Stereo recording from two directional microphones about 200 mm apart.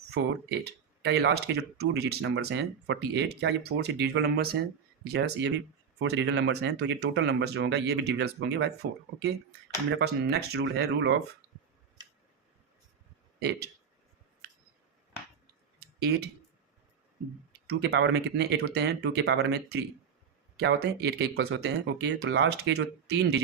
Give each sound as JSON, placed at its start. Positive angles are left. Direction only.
{"t": 0.2, "sound": "speech", "side_deg": -65}
{"t": 13.4, "sound": "speech", "side_deg": -55}
{"t": 15.8, "sound": "a sound", "side_deg": -55}
{"t": 17.7, "sound": "speech", "side_deg": -55}